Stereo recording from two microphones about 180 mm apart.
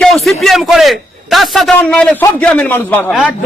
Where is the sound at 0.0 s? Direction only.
Centre (ahead or behind).